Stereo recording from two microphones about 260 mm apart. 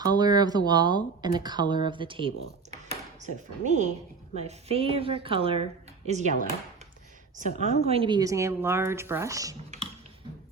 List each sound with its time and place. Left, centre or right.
0.0 s a woman's voice: centre
7.3 s speech: right